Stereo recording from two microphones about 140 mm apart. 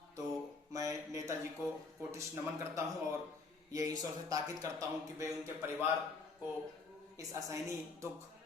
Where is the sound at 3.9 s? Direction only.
25° right (ahead or behind).